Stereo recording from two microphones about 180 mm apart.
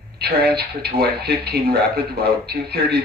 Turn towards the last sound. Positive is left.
turn(degrees=-60)  # may be behind; listen again after turning